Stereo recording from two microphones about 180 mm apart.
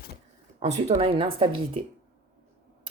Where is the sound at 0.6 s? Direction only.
35° right (ahead or behind).